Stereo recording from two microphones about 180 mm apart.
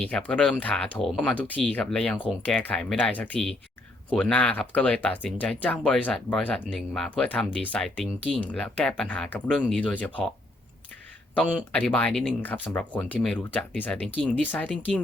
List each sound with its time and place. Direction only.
0.0 s speech: 5° left (ahead or behind)
11.7 s speech: 5° left (ahead or behind)